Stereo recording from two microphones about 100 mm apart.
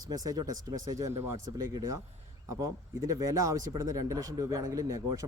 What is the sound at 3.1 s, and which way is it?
Speech, 30° right (ahead or behind).